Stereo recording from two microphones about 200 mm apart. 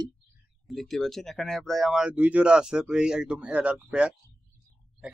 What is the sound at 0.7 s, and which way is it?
Speech, centre (ahead or behind).